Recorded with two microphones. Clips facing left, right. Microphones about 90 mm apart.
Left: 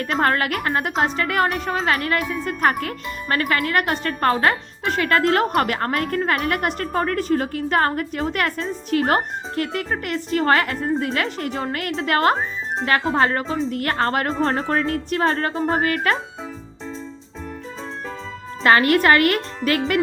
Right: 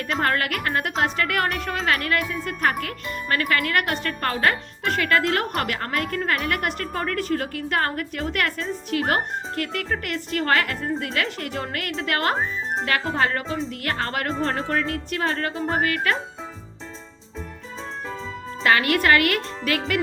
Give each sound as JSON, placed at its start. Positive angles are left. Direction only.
{"t": 0.0, "sound": "a woman's voice", "side_deg": 35}
{"t": 18.6, "sound": "a woman's voice", "side_deg": 35}